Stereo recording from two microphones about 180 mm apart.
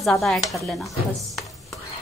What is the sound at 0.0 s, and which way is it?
Speech, centre (ahead or behind).